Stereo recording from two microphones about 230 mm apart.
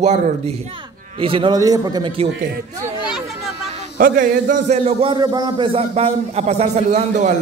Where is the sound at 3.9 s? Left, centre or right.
Right.